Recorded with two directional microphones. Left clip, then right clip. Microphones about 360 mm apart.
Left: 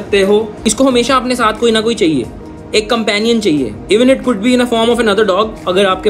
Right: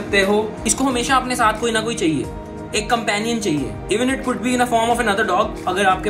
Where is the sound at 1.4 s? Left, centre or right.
Left.